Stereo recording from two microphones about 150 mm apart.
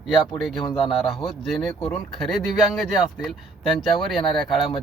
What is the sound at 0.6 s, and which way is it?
Speech, 30° left (ahead or behind).